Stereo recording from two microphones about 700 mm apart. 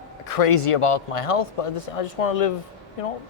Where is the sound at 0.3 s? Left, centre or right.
Left.